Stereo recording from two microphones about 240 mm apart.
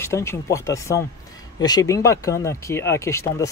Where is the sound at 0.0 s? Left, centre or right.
Centre.